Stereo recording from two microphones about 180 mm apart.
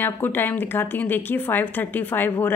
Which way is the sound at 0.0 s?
10° left (ahead or behind).